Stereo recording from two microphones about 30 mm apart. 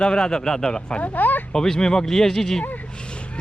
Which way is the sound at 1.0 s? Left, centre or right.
Left.